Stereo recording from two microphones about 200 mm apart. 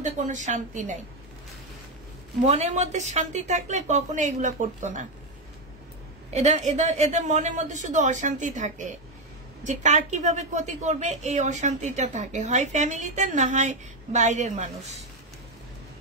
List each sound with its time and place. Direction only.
0.0 s a woman's voice: 40° right (ahead or behind)
2.4 s a woman's voice: 35° right (ahead or behind)
6.3 s a woman's voice: 35° right (ahead or behind)